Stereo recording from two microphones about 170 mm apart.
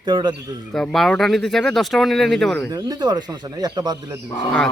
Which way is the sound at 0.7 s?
Centre (ahead or behind).